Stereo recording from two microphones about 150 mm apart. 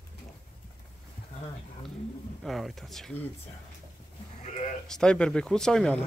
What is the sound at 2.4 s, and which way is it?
Speech, centre (ahead or behind).